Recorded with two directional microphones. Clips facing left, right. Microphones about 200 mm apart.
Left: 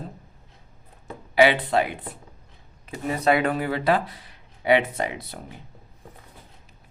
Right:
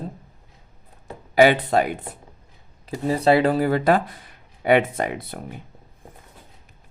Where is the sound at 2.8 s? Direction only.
30° right (ahead or behind); by 5.4 s 55° right (ahead or behind).